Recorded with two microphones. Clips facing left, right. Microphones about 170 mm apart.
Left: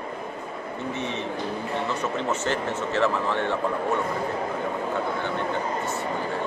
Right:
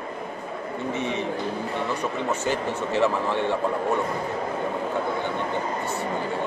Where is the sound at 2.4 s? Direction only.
15° right (ahead or behind).